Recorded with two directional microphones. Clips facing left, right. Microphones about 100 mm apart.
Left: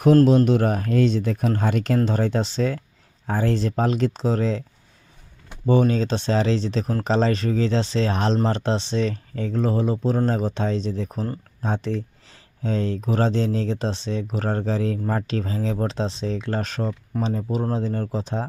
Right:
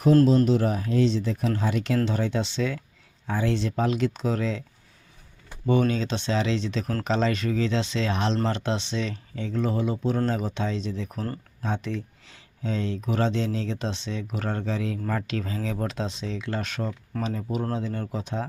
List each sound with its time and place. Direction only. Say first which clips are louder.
0.3 s speech: left 3 dB; 65° left (ahead or behind); by 4.6 s 35° left (ahead or behind)
5.9 s speech: left 4 dB; 35° left (ahead or behind)